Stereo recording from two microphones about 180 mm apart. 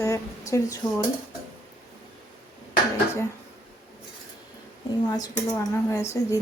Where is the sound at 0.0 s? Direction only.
15° left (ahead or behind).